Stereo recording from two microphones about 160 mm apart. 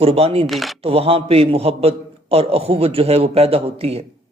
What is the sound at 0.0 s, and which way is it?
Speech, 40° right (ahead or behind).